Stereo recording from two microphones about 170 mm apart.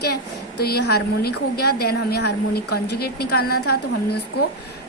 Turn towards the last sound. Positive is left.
turn(degrees=70)  # may be behind; listen again after turning